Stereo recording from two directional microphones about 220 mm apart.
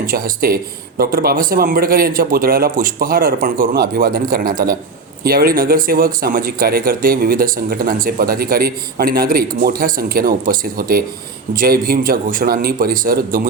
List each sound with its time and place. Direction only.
0.0 s speech: 40° right (ahead or behind)